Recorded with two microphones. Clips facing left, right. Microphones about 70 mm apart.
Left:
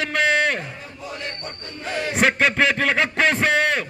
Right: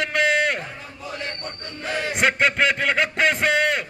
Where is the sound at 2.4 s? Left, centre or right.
Centre.